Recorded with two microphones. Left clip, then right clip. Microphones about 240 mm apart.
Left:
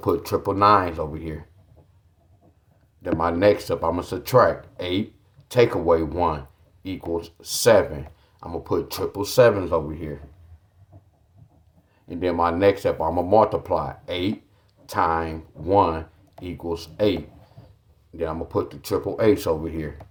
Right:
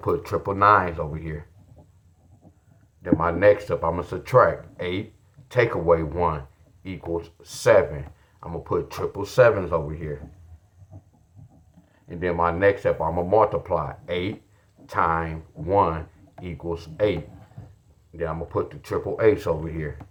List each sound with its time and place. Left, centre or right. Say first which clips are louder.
0.0 s speech: left 2 dB; left
3.0 s speech: even; left
12.0 s speech: left 1 dB; left
18.2 s speech: left 1 dB; left